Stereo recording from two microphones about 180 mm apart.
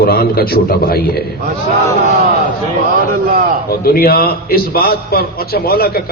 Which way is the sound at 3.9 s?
55° left (ahead or behind).